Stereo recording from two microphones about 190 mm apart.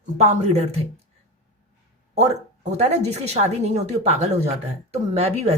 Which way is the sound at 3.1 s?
35° right (ahead or behind).